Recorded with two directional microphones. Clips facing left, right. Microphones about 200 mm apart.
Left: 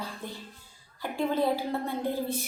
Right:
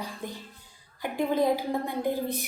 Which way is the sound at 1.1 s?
15° right (ahead or behind).